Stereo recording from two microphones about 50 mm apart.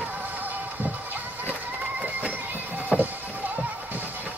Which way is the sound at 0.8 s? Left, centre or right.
Right.